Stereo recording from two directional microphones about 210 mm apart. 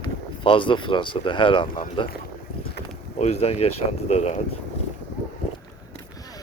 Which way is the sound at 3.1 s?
30° left (ahead or behind).